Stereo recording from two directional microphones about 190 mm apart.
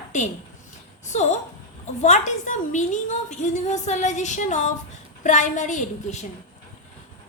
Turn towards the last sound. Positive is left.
turn(degrees=40)  # may be behind; listen again after turning